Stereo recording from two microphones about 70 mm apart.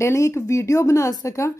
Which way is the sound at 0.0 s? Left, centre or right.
Left.